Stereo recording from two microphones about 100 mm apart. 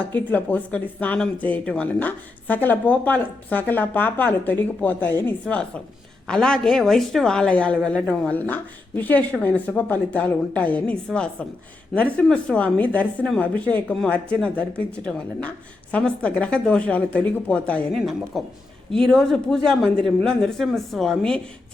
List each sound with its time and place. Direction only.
0.0 s speech: 15° left (ahead or behind)
6.2 s speech: 5° left (ahead or behind)
17.9 s speech: centre (ahead or behind)